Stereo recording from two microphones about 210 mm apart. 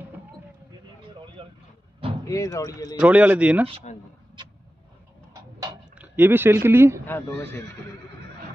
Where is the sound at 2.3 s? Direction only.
15° left (ahead or behind).